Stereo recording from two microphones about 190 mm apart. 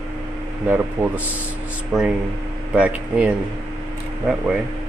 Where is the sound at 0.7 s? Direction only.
10° right (ahead or behind).